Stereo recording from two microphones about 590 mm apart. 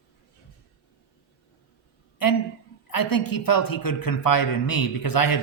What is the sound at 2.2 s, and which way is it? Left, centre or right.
Speech, left.